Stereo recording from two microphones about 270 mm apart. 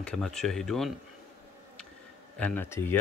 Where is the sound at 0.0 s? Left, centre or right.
Centre.